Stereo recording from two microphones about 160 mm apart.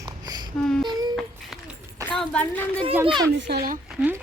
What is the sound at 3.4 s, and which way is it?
Speech, 75° right (ahead or behind).